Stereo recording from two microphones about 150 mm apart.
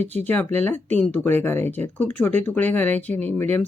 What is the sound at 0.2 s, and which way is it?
Speech, 10° left (ahead or behind).